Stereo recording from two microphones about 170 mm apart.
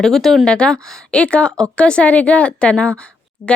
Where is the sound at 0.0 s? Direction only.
Centre (ahead or behind).